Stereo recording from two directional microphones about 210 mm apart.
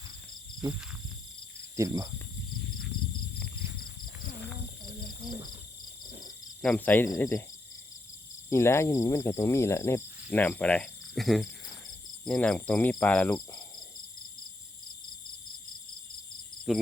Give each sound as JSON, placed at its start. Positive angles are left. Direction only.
{"t": 1.7, "sound": "speech", "side_deg": -15}
{"t": 6.6, "sound": "speech", "side_deg": 5}
{"t": 8.4, "sound": "speech", "side_deg": 15}
{"t": 10.3, "sound": "cricket", "side_deg": 10}
{"t": 12.2, "sound": "speech", "side_deg": 5}
{"t": 13.3, "sound": "cricket", "side_deg": 15}